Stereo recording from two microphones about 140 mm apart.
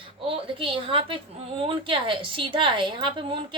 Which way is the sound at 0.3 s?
40° right (ahead or behind).